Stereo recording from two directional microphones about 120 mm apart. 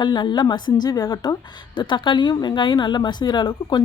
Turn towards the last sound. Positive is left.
turn(degrees=35)  # may be behind; listen again after turning